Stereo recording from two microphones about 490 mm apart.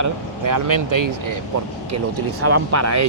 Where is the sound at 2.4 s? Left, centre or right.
Right.